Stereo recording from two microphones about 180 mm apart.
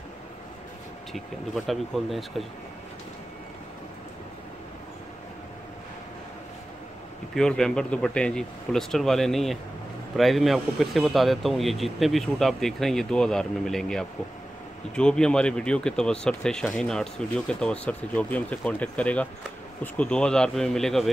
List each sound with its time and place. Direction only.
1.1 s speech: centre (ahead or behind)
7.3 s speech: 5° left (ahead or behind)